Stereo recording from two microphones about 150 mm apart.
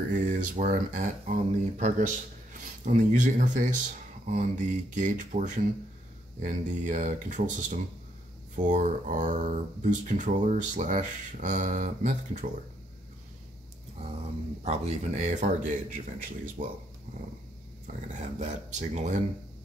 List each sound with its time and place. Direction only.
0.1 s speech: 60° right (ahead or behind)
14.6 s speech: 45° right (ahead or behind); by 16.6 s 65° right (ahead or behind)
18.1 s speech: 50° right (ahead or behind)